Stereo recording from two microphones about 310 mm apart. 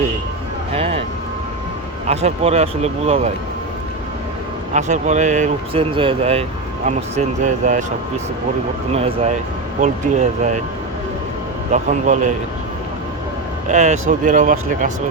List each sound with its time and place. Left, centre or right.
0.7 s vehicle: centre
2.0 s speech: right
4.7 s speech: right
11.7 s speech: right
13.7 s speech: right